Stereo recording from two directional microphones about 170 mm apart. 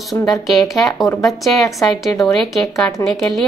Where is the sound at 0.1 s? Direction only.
Centre (ahead or behind).